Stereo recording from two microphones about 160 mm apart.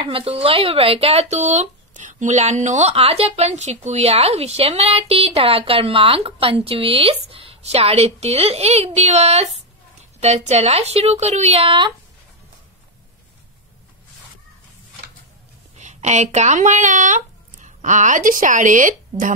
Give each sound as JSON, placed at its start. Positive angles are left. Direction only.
{"t": 0.0, "sound": "speech", "side_deg": -35}
{"t": 15.8, "sound": "speech", "side_deg": -45}